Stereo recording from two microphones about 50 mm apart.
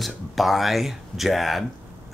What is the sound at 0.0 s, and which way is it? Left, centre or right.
Speech, centre.